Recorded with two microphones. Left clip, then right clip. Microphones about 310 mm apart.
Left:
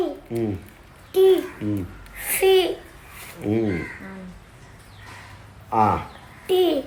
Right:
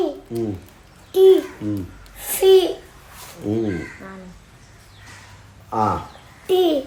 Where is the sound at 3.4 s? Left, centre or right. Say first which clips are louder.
Even; centre.